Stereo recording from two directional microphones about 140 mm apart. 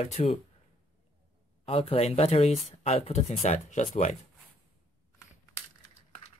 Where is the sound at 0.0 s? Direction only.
50° left (ahead or behind).